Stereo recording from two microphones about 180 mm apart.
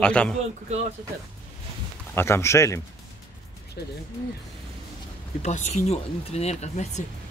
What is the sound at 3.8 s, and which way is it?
Speech, 65° left (ahead or behind).